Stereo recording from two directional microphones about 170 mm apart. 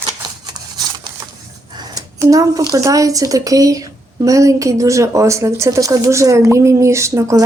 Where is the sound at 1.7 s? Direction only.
20° right (ahead or behind).